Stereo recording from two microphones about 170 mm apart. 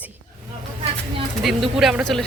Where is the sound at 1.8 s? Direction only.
Centre (ahead or behind).